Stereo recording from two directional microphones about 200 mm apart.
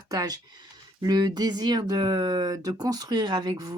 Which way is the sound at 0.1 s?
20° right (ahead or behind).